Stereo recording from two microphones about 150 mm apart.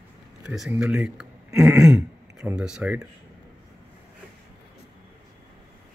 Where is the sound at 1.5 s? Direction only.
20° right (ahead or behind).